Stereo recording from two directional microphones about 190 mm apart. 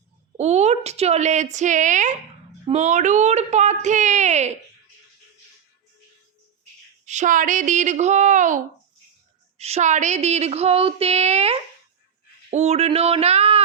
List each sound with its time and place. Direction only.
0.3 s a woman's voice: 35° right (ahead or behind)
7.0 s a woman's voice: 40° right (ahead or behind)